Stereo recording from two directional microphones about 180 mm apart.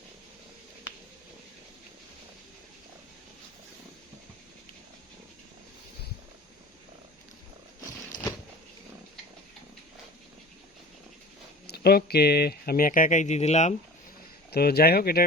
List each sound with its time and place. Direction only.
11.6 s speech: 65° left (ahead or behind); by 13.7 s 40° left (ahead or behind)
14.5 s speech: 60° left (ahead or behind)